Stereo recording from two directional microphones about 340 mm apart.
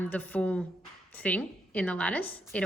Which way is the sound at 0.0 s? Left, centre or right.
Centre.